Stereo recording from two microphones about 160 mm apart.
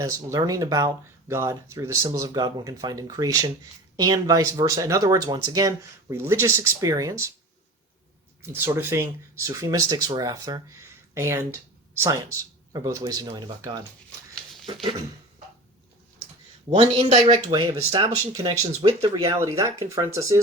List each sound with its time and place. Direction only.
0.0 s speech: 20° right (ahead or behind)
8.4 s speech: 15° right (ahead or behind)
16.6 s speech: 35° right (ahead or behind)
19.4 s speech: 20° right (ahead or behind)